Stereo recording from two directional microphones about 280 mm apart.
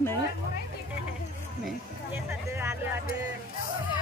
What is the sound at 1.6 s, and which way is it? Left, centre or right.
Music, centre.